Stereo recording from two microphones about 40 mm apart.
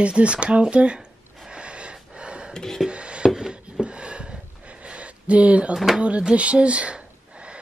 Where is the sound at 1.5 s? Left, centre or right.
Right.